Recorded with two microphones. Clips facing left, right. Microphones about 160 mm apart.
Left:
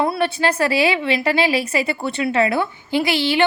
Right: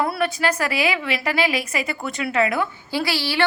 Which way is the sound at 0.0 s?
25° left (ahead or behind).